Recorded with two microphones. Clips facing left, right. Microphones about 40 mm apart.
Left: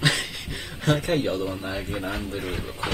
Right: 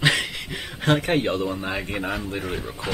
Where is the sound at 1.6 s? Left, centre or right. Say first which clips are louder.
Right 2 dB; right.